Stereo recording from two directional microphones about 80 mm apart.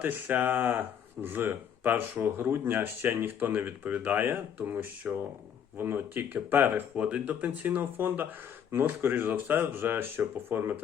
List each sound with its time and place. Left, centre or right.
0.0 s speech: right